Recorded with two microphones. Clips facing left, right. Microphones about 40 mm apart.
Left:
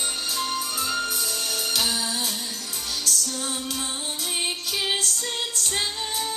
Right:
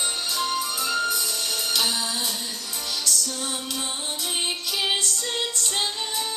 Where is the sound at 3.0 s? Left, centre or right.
Left.